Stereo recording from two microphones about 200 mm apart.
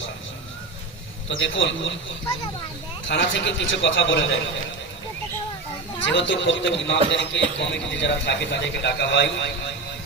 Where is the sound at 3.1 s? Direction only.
65° left (ahead or behind).